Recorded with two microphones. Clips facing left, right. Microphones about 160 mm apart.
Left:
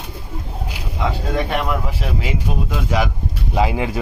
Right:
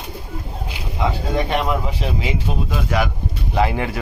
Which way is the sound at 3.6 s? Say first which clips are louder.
Even; 10° left (ahead or behind).